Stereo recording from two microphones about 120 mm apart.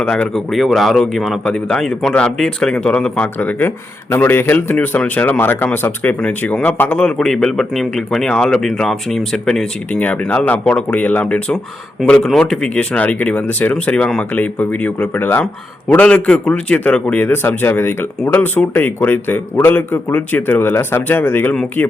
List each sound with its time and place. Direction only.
0.0 s a man's voice: 10° left (ahead or behind)